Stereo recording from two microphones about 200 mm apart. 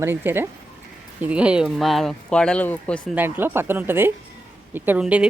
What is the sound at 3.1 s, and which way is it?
Speech, 10° right (ahead or behind).